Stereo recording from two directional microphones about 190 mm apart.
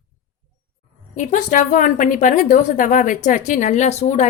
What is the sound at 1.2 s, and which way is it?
A woman's voice, 40° left (ahead or behind).